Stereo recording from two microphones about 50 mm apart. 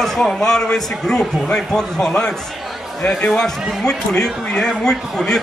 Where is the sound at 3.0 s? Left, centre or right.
Left.